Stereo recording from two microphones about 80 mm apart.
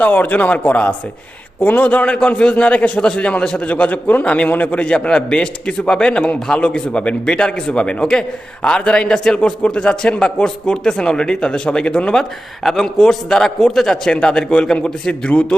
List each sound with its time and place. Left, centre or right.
0.0 s a man's voice: centre